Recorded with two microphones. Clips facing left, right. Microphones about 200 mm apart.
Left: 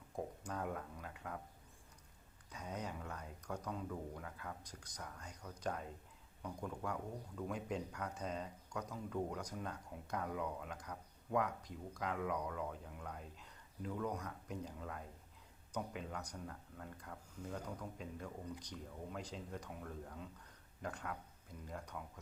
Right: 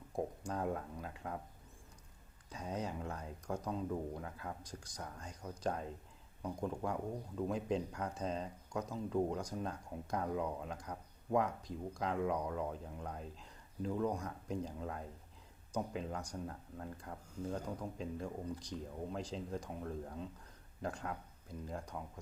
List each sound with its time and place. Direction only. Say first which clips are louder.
0.4 s speech: right 5 dB; 30° right (ahead or behind)
2.5 s speech: right 4 dB; 30° right (ahead or behind)